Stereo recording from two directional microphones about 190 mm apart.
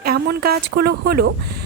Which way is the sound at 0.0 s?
55° right (ahead or behind).